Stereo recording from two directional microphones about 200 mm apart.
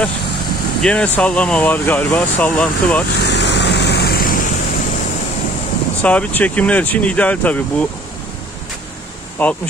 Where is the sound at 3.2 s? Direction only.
60° left (ahead or behind).